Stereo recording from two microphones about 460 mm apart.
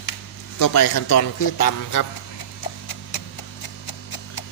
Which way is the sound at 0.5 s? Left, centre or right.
Left.